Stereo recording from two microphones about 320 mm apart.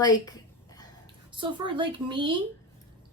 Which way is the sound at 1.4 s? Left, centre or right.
Centre.